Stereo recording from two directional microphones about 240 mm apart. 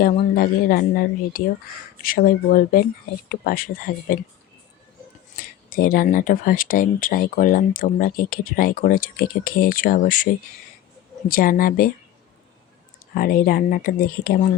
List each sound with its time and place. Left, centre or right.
0.0 s speech: left
5.4 s speech: left
11.3 s speech: left
13.1 s speech: left